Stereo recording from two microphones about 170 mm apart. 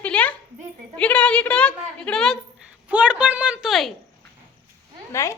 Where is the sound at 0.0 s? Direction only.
10° left (ahead or behind).